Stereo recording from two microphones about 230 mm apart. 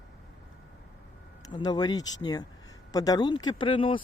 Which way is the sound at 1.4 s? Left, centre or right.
Centre.